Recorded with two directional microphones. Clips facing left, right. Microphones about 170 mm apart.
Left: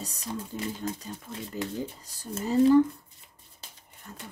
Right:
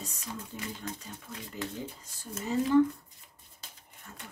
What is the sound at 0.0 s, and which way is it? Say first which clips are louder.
Speech: left 5 dB; 35° left (ahead or behind).